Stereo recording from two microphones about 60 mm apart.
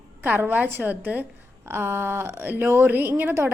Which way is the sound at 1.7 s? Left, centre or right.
Right.